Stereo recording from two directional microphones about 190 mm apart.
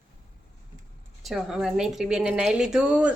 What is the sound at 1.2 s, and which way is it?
Speech, centre (ahead or behind).